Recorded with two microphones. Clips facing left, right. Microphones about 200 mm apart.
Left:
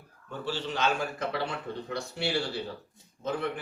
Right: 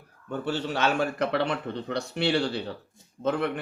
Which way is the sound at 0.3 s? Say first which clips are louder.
Right 5 dB; 60° right (ahead or behind).